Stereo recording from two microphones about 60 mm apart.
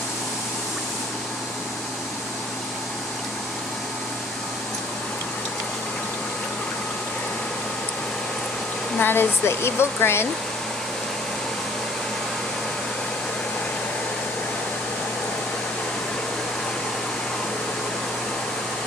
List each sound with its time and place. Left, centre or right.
8.9 s speech: left